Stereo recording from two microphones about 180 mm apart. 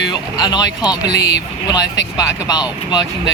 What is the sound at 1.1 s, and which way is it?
Speech, 70° left (ahead or behind).